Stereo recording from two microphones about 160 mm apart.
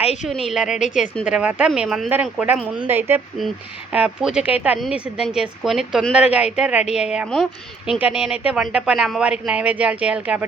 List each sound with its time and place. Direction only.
0.0 s a woman's voice: 40° left (ahead or behind)
0.3 s a woman's voice: centre (ahead or behind)